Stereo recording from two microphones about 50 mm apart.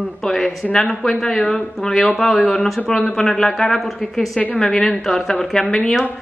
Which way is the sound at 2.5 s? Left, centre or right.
Centre.